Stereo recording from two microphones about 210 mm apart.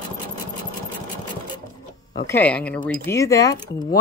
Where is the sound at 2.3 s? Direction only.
5° left (ahead or behind).